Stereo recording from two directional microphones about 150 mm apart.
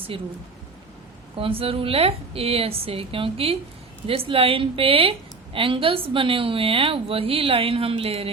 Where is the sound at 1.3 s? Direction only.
40° right (ahead or behind).